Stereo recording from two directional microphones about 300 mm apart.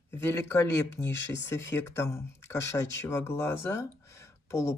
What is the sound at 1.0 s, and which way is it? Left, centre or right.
Speech, left.